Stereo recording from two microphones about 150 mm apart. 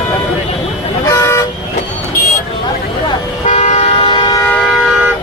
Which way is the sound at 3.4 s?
50° left (ahead or behind).